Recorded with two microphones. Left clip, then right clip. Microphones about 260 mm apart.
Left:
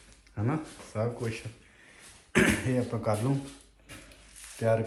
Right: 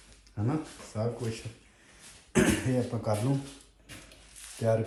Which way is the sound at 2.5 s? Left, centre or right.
Centre.